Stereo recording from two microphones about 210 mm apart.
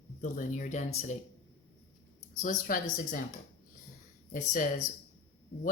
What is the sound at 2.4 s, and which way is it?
Speech, 40° left (ahead or behind).